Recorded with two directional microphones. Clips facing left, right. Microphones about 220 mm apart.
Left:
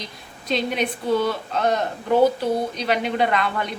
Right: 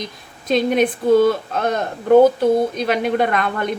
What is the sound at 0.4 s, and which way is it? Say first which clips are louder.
A woman's voice: right 7 dB; 50° right (ahead or behind).